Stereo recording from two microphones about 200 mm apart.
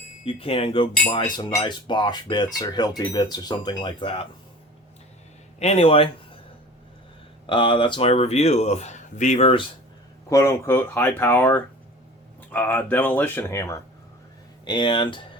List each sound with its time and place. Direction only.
0.3 s cutlery: 30° left (ahead or behind)
5.5 s speech: 30° left (ahead or behind)
7.4 s speech: 25° left (ahead or behind)
10.2 s speech: 15° left (ahead or behind)